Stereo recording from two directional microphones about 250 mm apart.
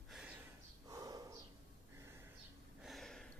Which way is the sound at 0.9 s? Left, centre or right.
Centre.